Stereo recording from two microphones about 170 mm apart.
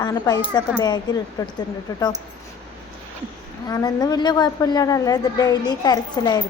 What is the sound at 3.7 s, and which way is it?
A woman's voice, 25° left (ahead or behind).